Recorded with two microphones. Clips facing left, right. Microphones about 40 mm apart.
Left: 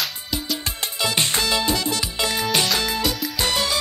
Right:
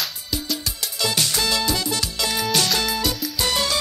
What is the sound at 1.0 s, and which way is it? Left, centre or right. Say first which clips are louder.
Music: left 1 dB; left.